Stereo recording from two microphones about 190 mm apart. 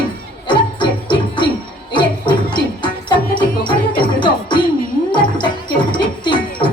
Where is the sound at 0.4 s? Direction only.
25° left (ahead or behind).